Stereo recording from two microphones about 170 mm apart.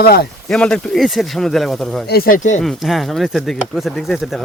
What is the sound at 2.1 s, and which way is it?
Speech, 60° left (ahead or behind).